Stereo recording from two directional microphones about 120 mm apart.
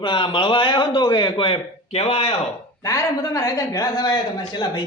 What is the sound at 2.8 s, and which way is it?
Speech, 25° left (ahead or behind).